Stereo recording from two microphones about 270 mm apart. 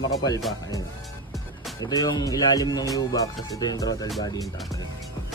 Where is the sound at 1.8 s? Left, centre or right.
Centre.